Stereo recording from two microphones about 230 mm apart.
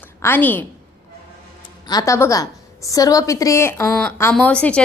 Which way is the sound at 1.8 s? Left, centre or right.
Centre.